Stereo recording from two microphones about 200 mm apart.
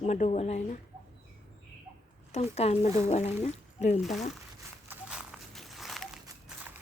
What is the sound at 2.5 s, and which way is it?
Speech, 35° left (ahead or behind).